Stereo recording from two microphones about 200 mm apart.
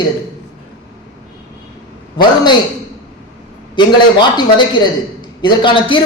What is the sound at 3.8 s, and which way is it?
A man's voice, 20° left (ahead or behind).